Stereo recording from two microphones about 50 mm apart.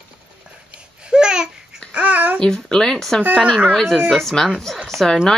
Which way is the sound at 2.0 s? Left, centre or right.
Right.